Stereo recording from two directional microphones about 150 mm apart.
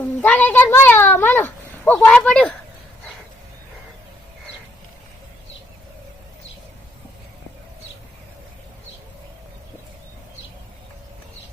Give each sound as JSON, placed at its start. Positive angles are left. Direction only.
{"t": 0.0, "sound": "speech", "side_deg": 10}